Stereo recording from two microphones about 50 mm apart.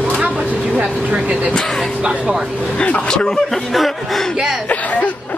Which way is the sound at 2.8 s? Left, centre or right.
Left.